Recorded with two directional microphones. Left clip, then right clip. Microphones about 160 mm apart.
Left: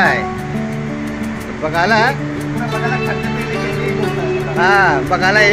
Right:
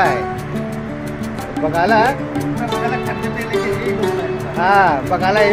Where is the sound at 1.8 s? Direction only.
5° right (ahead or behind).